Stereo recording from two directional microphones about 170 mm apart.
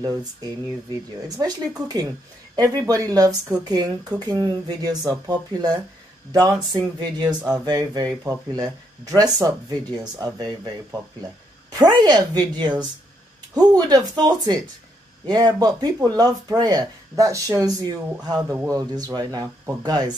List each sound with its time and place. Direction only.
0.0 s speech: 20° right (ahead or behind)
1.9 s speech: 20° right (ahead or behind)